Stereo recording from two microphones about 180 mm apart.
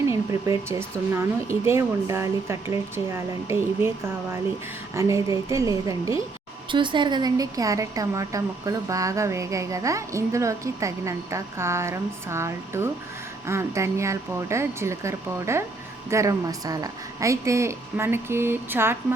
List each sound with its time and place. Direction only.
0.0 s speech: 15° right (ahead or behind)